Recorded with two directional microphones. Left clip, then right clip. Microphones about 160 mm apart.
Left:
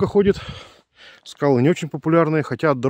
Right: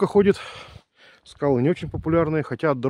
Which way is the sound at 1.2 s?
35° left (ahead or behind).